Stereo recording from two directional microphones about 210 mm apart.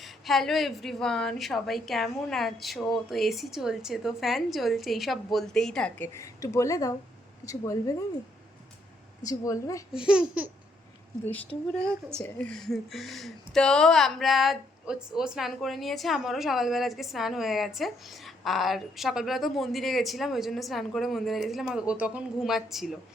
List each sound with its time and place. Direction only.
0.0 s a woman's voice: centre (ahead or behind); by 8.0 s 15° left (ahead or behind)
9.2 s a woman's voice: 15° left (ahead or behind)
9.9 s speech: 5° right (ahead or behind)
12.1 s speech: 5° left (ahead or behind)